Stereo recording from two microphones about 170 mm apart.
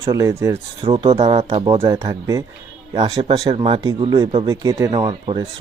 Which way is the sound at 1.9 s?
20° right (ahead or behind).